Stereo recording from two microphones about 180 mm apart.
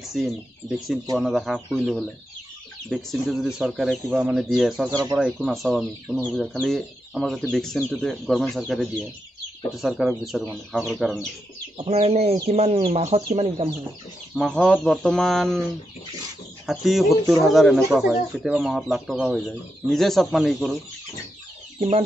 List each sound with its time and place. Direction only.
0.1 s speech: centre (ahead or behind)
11.8 s speech: 35° right (ahead or behind)
14.3 s speech: 5° left (ahead or behind)
16.6 s speech: centre (ahead or behind)
21.7 s speech: 35° right (ahead or behind)